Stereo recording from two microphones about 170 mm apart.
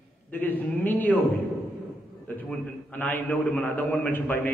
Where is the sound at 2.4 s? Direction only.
10° left (ahead or behind).